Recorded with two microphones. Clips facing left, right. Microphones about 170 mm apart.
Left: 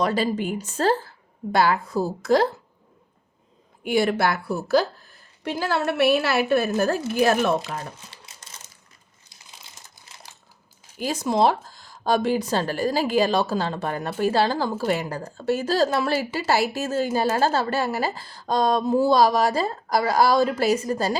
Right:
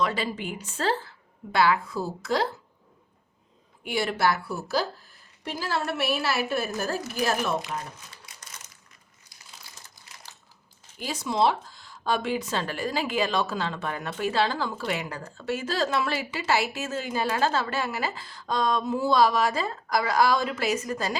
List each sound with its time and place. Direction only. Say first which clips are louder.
0.0 s speech: left 5 dB; 40° left (ahead or behind)
3.8 s a woman's voice: left 4 dB; 50° left (ahead or behind)
7.6 s a sound: left 2 dB; 30° left (ahead or behind)
9.3 s crumpling: left 1 dB; 25° left (ahead or behind)
11.0 s speech: left 4 dB; 45° left (ahead or behind)